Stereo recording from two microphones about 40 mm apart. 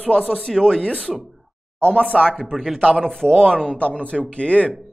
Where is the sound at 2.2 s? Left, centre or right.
Centre.